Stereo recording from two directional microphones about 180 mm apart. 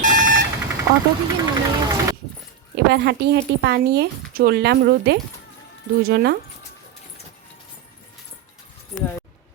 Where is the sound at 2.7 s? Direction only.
70° right (ahead or behind).